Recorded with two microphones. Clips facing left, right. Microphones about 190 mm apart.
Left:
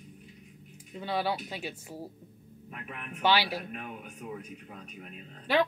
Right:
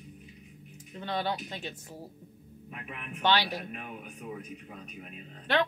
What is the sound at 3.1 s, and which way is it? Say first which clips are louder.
Speech: left 1 dB; 10° left (ahead or behind).